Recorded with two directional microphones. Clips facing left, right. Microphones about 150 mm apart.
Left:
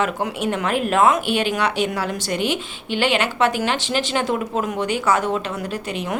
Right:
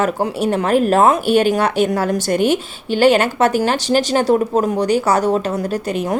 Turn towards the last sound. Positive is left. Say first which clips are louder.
# right 6 dB
turn(degrees=-45)  # may be behind; listen again after turning